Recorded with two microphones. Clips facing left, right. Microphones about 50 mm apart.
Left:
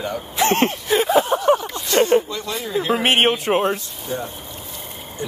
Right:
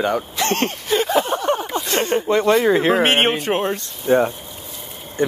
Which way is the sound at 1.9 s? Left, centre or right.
Right.